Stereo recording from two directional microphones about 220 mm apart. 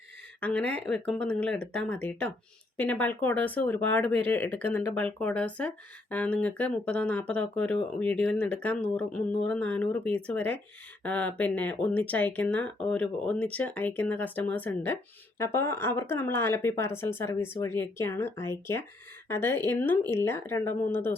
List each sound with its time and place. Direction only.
0.3 s speech: 5° left (ahead or behind)